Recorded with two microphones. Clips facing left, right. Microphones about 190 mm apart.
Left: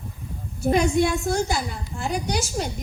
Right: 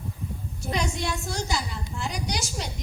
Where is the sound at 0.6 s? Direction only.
55° left (ahead or behind).